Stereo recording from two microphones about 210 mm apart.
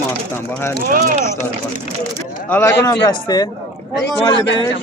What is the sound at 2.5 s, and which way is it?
Speech, 10° left (ahead or behind).